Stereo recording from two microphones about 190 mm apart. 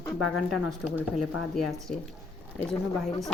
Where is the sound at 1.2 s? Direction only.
Centre (ahead or behind).